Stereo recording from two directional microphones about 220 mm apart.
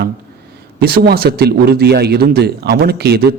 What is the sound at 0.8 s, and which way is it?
A man's voice, 45° right (ahead or behind).